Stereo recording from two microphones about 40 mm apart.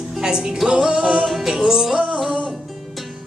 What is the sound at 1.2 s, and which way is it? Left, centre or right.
Music, centre.